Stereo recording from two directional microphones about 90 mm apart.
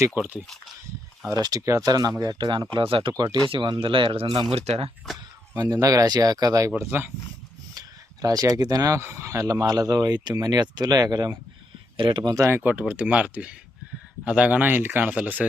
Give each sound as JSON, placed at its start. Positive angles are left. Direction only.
{"t": 0.4, "sound": "speech", "side_deg": 5}
{"t": 1.3, "sound": "speech", "side_deg": -45}
{"t": 2.7, "sound": "speech", "side_deg": -70}
{"t": 5.5, "sound": "speech", "side_deg": -40}
{"t": 6.7, "sound": "speech", "side_deg": -25}
{"t": 7.7, "sound": "a sound", "side_deg": -45}
{"t": 9.0, "sound": "speech", "side_deg": -30}
{"t": 11.9, "sound": "speech", "side_deg": -65}
{"t": 12.4, "sound": "speech", "side_deg": -30}
{"t": 12.8, "sound": "speech", "side_deg": -15}